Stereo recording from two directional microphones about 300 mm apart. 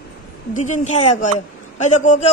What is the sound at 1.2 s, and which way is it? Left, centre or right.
A man's voice, left.